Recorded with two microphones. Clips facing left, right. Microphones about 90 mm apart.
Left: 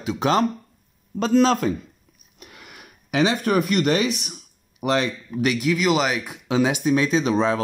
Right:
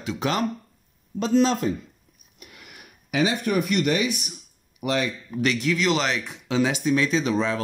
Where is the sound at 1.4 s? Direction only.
90° left.